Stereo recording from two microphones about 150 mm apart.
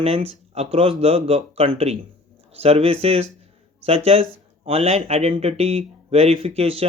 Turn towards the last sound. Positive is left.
turn(degrees=-40)  # may be behind; listen again after turning